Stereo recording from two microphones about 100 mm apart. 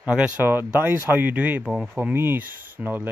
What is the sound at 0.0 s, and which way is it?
Speech, 15° right (ahead or behind).